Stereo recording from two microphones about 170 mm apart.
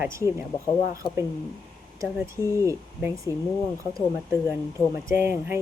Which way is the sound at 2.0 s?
20° right (ahead or behind).